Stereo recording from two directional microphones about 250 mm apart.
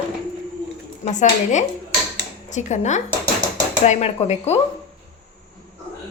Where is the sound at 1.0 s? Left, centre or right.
Left.